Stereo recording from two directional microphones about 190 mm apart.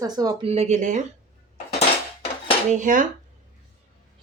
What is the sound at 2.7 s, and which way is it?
Speech, 40° right (ahead or behind).